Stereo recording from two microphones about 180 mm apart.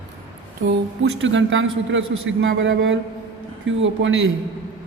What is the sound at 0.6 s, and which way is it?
Speech, 80° right.